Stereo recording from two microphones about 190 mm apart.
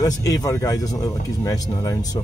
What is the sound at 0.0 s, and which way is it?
Speech, 20° left (ahead or behind).